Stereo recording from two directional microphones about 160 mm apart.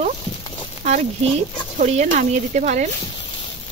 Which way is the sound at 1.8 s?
50° right (ahead or behind).